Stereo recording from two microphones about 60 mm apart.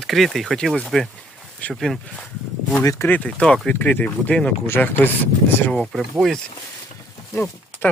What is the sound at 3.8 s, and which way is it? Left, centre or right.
Speech, left.